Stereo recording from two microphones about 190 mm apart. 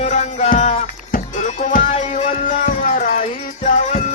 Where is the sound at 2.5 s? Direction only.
45° left (ahead or behind).